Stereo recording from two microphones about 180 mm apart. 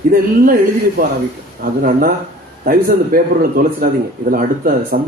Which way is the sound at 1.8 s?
50° right (ahead or behind).